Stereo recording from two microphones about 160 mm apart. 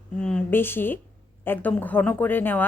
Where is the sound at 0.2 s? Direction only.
5° left (ahead or behind).